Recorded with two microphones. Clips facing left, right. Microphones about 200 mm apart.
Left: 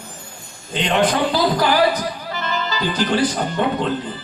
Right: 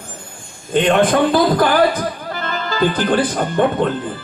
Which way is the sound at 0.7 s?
50° right (ahead or behind).